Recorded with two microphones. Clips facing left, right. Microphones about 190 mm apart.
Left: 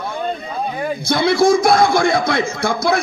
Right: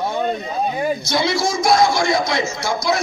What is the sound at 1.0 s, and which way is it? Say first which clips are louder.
Speech: left 5 dB; 55° left (ahead or behind).